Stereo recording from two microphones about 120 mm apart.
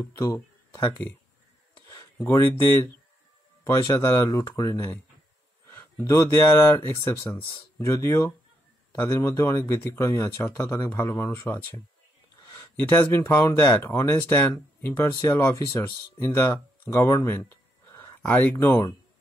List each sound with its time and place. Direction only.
0.0 s speech: 25° left (ahead or behind)
2.2 s speech: 25° left (ahead or behind)
18.7 s speech: 25° left (ahead or behind)